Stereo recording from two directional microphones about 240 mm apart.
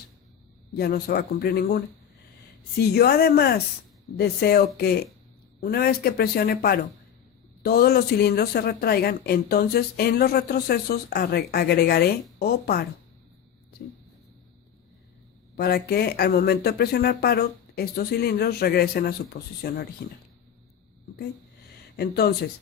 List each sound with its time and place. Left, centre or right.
0.8 s speech: left
15.5 s speech: left
21.9 s speech: left